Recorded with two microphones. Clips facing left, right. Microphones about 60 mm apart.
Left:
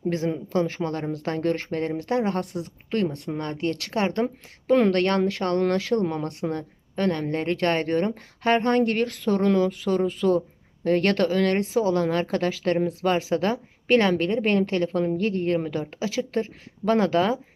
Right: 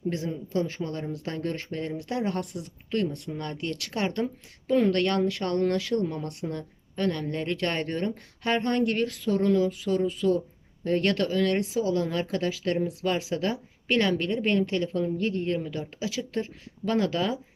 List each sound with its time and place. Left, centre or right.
0.3 s speech: left
4.7 s speech: left
4.9 s speech: left